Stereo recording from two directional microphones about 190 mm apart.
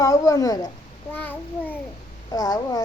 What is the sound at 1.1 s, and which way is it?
A woman's voice, 10° left (ahead or behind).